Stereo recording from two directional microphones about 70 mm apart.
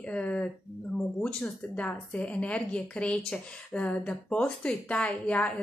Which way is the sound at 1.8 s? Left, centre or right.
Centre.